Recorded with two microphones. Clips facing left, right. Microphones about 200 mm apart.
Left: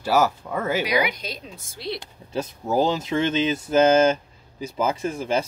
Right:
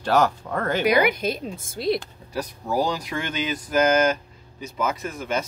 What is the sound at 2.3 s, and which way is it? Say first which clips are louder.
Speech: left 2 dB; 25° left (ahead or behind).